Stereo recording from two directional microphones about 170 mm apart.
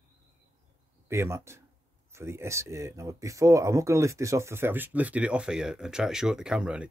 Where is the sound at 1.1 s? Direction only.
15° right (ahead or behind).